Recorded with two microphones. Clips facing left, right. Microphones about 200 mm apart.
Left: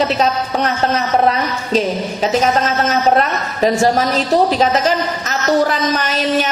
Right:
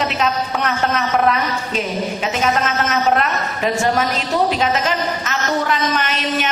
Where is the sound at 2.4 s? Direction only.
35° left (ahead or behind).